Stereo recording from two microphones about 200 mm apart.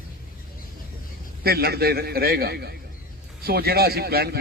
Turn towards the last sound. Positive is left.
turn(degrees=-50)  # may be behind; listen again after turning